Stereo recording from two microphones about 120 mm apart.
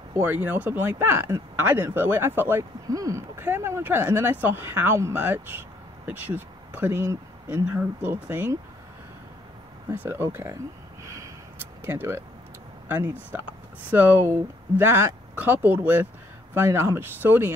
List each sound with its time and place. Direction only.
0.1 s speech: 15° right (ahead or behind)
2.9 s speech: 30° right (ahead or behind)
10.0 s speech: 20° right (ahead or behind)
11.8 s speech: 20° right (ahead or behind)